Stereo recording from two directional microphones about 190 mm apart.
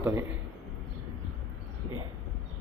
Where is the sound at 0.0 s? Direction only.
15° right (ahead or behind).